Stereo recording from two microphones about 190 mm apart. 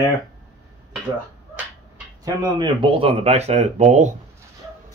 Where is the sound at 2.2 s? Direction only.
20° right (ahead or behind); by 4.1 s 35° right (ahead or behind).